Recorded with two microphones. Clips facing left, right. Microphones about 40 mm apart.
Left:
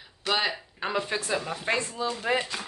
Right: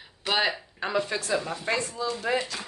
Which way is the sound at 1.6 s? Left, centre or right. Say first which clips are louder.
Even; left.